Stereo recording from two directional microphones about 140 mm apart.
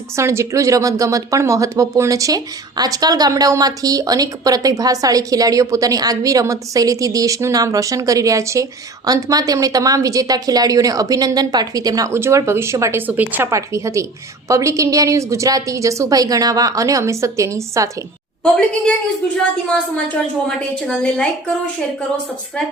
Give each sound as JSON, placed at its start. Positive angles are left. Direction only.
{"t": 0.2, "sound": "speech", "side_deg": -20}
{"t": 20.6, "sound": "a woman's voice", "side_deg": 5}